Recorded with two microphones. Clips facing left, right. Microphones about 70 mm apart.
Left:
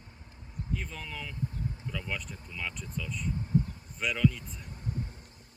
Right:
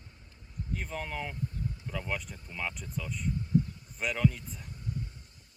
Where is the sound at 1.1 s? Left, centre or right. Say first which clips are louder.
Right 4 dB; right.